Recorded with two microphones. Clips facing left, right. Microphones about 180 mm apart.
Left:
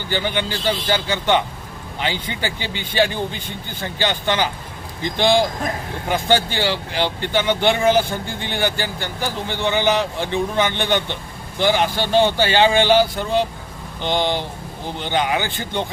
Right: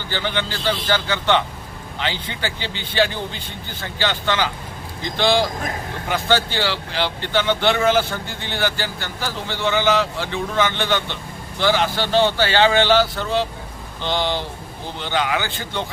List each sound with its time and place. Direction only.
0.1 s a man's voice: 15° left (ahead or behind)